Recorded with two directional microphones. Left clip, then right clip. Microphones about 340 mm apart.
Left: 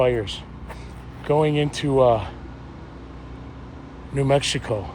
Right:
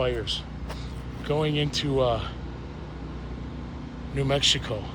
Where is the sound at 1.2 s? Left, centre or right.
Centre.